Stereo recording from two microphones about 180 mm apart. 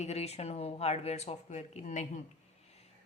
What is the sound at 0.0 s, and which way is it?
A woman's voice, 35° left (ahead or behind).